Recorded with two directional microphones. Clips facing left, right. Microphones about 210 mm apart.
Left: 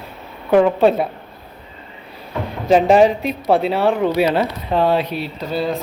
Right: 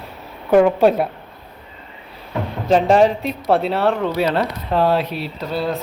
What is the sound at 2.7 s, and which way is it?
Speech, 5° left (ahead or behind).